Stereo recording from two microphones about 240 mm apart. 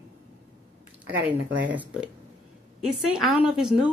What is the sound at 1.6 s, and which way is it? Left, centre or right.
A woman's voice, centre.